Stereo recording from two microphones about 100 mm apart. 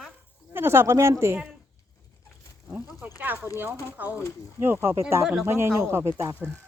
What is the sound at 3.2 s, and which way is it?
Speech, 20° right (ahead or behind).